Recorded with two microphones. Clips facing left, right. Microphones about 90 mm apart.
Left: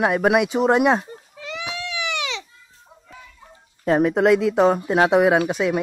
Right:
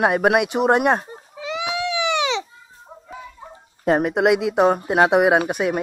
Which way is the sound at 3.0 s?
25° right (ahead or behind).